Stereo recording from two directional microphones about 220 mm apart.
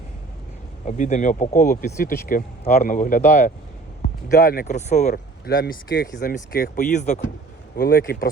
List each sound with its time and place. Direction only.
0.9 s speech: 35° left (ahead or behind)